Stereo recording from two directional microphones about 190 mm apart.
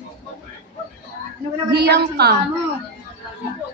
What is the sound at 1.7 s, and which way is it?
Speech, 60° right (ahead or behind).